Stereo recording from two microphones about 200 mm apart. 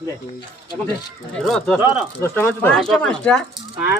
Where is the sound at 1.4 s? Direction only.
5° left (ahead or behind).